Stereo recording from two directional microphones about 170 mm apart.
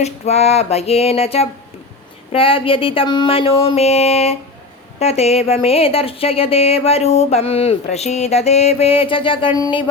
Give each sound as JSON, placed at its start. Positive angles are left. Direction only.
{"t": 0.0, "sound": "speech", "side_deg": 40}